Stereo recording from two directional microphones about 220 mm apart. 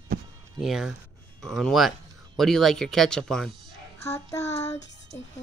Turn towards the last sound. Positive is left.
turn(degrees=10)  # may be behind; listen again after turning